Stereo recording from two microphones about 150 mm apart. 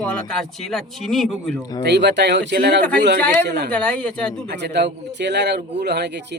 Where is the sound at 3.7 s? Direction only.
10° left (ahead or behind).